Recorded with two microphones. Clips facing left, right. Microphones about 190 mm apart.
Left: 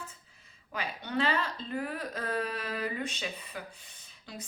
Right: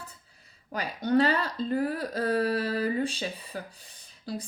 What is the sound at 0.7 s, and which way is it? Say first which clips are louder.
A woman's voice: right 9 dB; 40° right (ahead or behind).